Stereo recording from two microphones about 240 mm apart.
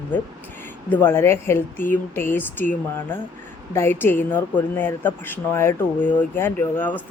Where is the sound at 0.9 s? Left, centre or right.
Centre.